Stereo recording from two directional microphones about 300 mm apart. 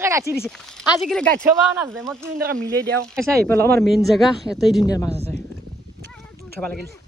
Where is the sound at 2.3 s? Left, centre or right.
Right.